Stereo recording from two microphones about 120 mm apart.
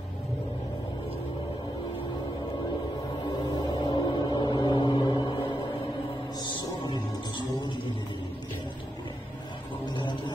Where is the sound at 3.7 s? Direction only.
40° left (ahead or behind).